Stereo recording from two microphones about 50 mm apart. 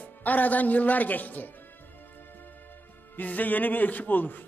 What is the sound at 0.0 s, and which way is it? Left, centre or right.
A man's voice, left.